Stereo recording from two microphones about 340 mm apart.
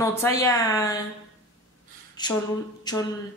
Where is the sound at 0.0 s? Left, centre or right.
Centre.